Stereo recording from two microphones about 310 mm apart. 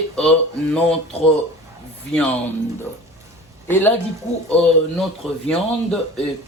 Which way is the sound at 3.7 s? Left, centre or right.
Centre.